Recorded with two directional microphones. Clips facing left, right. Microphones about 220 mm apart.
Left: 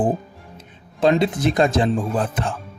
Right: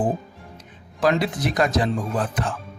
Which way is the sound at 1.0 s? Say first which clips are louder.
Left 4 dB; 25° left (ahead or behind).